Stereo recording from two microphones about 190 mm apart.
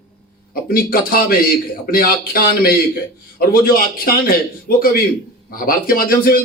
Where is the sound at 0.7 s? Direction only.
50° left (ahead or behind).